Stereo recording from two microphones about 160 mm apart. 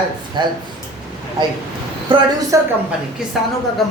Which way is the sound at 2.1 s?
30° right (ahead or behind).